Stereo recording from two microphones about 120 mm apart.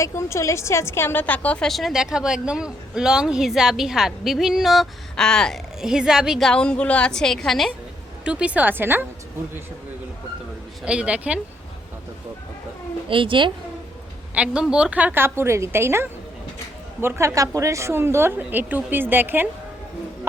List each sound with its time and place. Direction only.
0.0 s a woman's voice: 25° left (ahead or behind); by 6.5 s 5° right (ahead or behind)
6.5 s a woman's voice: 10° left (ahead or behind)
8.2 s a woman's voice: 10° right (ahead or behind)
10.8 s a woman's voice: 10° right (ahead or behind)
13.1 s speech: 45° right (ahead or behind)
14.3 s a woman's voice: 10° right (ahead or behind)